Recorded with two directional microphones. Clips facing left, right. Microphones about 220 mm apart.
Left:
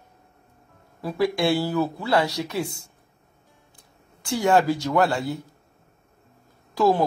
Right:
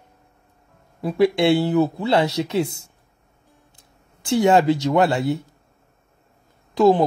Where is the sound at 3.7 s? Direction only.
25° right (ahead or behind).